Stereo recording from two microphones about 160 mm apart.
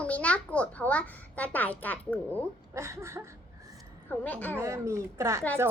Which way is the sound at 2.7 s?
20° right (ahead or behind).